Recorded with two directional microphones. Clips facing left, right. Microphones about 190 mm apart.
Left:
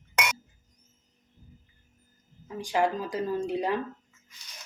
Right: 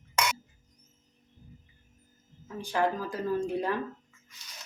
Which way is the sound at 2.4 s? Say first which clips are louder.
Left 2 dB; 15° left (ahead or behind).